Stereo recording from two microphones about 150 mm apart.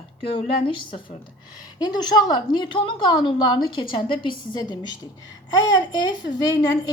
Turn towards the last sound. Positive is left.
turn(degrees=25)  # may be behind; listen again after turning